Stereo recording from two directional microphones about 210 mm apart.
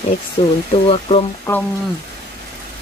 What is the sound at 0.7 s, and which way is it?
Speech, 25° left (ahead or behind).